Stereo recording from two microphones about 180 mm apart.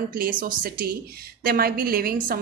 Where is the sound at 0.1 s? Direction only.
50° right (ahead or behind).